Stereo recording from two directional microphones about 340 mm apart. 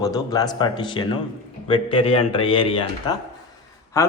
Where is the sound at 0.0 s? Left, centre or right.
Centre.